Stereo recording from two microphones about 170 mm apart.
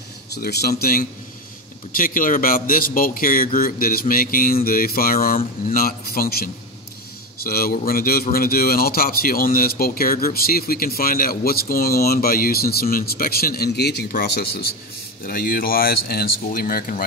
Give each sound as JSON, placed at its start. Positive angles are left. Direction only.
{"t": 0.3, "sound": "speech", "side_deg": 70}